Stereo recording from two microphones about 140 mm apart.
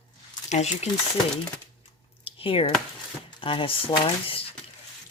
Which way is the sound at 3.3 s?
40° left (ahead or behind).